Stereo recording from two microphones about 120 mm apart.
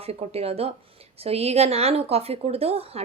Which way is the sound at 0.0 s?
60° right (ahead or behind).